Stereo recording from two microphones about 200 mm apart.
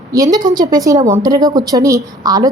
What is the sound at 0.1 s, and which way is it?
A woman's voice, 15° right (ahead or behind).